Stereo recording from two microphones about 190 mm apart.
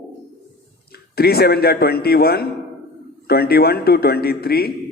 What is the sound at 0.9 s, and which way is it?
A man's voice, 55° left (ahead or behind).